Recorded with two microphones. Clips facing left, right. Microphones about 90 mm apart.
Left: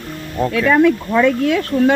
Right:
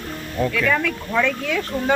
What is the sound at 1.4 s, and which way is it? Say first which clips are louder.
Speech: left 7 dB; 65° left (ahead or behind).